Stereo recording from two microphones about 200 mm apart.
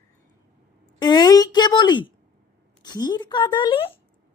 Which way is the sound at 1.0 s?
20° left (ahead or behind).